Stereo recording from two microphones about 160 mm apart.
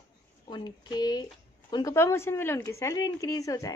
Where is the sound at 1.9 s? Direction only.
15° left (ahead or behind).